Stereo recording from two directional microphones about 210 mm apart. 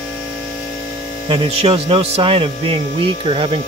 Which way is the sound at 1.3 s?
25° right (ahead or behind).